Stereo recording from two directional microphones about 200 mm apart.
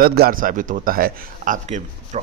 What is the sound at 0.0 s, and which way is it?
A man's voice, 50° right (ahead or behind).